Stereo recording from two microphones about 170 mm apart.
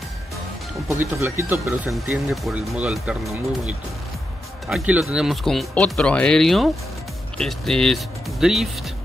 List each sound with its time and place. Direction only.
1.2 s speech: 15° right (ahead or behind)
1.9 s speech: centre (ahead or behind)